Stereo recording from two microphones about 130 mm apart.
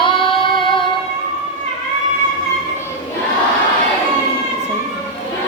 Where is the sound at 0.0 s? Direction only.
40° left (ahead or behind).